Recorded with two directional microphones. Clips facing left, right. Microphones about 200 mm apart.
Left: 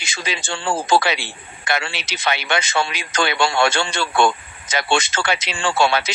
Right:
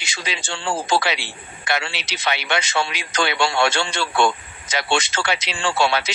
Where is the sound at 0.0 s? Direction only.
50° left (ahead or behind).